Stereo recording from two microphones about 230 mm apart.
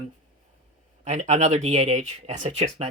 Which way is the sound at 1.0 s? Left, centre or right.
Right.